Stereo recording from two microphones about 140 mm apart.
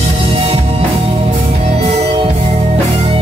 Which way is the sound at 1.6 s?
45° right (ahead or behind).